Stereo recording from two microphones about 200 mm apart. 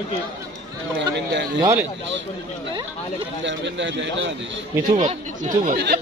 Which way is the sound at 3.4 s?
65° right (ahead or behind).